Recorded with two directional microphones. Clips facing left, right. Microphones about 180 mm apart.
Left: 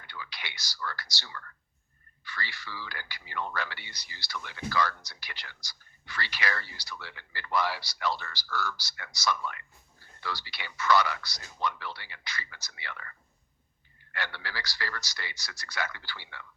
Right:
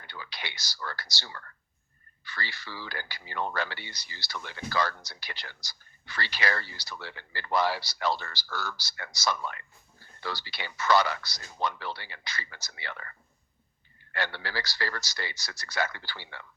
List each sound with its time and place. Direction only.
0.1 s speech: 30° right (ahead or behind)